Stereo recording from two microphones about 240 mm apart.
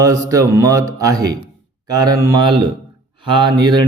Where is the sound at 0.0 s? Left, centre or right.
Centre.